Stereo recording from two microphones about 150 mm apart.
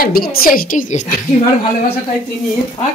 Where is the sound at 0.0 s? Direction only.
80° left; by 1.0 s 60° left (ahead or behind).